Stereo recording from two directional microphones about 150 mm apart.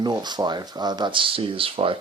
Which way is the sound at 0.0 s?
30° right (ahead or behind).